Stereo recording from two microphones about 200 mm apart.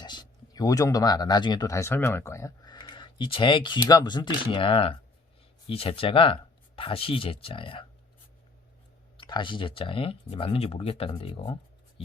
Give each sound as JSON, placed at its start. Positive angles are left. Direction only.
{"t": 0.0, "sound": "speech", "side_deg": 20}
{"t": 9.1, "sound": "speech", "side_deg": 25}